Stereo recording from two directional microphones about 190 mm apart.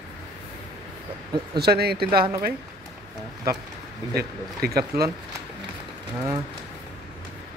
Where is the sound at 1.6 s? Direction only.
55° right (ahead or behind).